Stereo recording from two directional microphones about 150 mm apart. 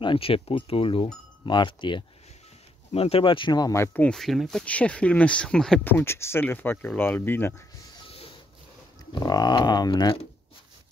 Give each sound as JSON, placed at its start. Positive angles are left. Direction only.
{"t": 0.0, "sound": "speech", "side_deg": 35}
{"t": 5.9, "sound": "speech", "side_deg": 15}
{"t": 9.1, "sound": "speech", "side_deg": 25}